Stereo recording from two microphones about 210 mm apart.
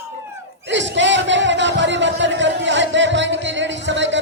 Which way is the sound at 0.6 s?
60° right (ahead or behind).